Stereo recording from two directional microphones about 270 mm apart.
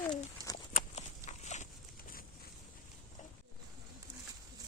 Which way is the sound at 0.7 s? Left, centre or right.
Left.